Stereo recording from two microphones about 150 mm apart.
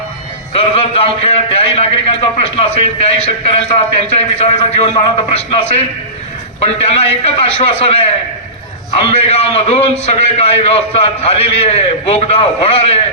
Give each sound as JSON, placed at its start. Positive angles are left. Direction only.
{"t": 0.5, "sound": "a man's voice", "side_deg": 40}